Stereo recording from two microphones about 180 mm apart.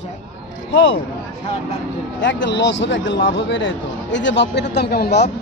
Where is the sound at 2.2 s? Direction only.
85° left; by 5.3 s 65° left (ahead or behind).